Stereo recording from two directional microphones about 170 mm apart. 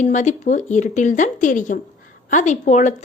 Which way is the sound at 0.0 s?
45° left (ahead or behind).